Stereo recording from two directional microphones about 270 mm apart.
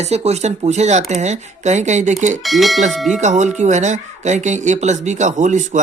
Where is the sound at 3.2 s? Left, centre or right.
Right.